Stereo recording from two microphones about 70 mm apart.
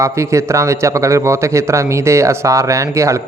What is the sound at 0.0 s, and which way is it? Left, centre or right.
A man's voice, right.